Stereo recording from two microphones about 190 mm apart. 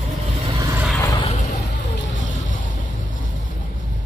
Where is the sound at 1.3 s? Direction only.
40° left (ahead or behind).